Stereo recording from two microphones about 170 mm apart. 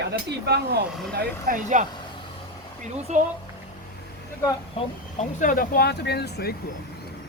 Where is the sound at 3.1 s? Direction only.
40° right (ahead or behind).